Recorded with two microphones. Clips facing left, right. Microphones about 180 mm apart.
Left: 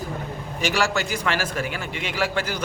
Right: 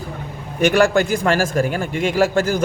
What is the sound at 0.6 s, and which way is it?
A man's voice, 55° right (ahead or behind).